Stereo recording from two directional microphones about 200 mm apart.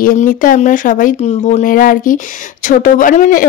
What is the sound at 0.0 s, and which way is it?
Speech, 45° left (ahead or behind).